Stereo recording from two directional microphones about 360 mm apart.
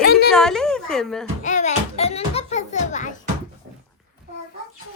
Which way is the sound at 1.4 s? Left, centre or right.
Centre.